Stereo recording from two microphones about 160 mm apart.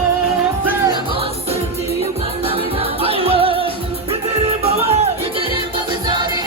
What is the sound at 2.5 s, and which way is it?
Music, 35° right (ahead or behind).